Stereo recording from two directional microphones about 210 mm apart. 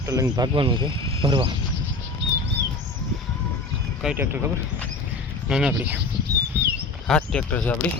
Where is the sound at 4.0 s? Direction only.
5° right (ahead or behind).